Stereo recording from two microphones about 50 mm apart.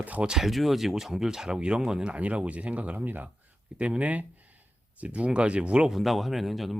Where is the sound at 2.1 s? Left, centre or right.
Right.